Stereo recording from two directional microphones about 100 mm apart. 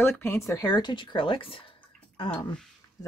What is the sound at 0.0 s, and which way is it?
Speech, 25° left (ahead or behind).